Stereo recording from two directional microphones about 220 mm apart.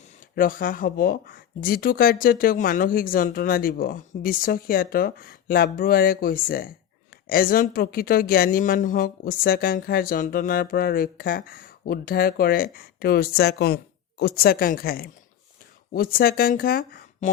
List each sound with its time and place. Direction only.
0.3 s speech: 40° left (ahead or behind)